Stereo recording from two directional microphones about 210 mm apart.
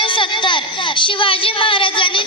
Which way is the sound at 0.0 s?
25° left (ahead or behind).